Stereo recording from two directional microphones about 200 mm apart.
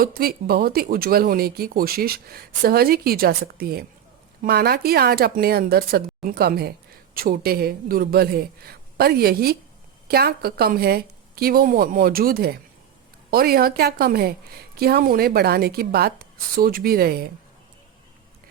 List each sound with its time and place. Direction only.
0.0 s speech: 45° right (ahead or behind)